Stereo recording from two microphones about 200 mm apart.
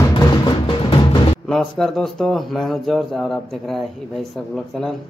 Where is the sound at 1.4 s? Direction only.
5° left (ahead or behind).